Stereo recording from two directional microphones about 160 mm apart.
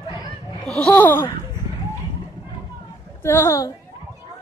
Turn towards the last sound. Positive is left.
turn(degrees=20)  # may be behind; listen again after turning